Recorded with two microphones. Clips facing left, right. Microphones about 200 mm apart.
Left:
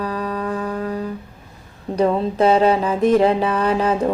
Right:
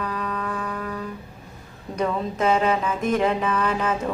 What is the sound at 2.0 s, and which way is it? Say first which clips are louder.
Mantra: left 7 dB; 35° left (ahead or behind).